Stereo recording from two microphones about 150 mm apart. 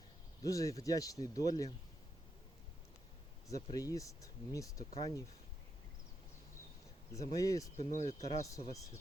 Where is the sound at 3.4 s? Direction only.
20° left (ahead or behind).